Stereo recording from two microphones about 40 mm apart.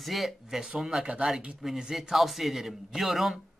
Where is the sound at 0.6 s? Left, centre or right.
Centre.